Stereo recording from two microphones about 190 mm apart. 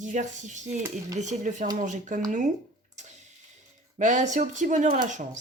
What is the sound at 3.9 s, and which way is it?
Speech, 40° right (ahead or behind).